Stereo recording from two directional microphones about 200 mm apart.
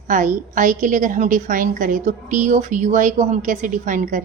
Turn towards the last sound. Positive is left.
turn(degrees=-40)  # may be behind; listen again after turning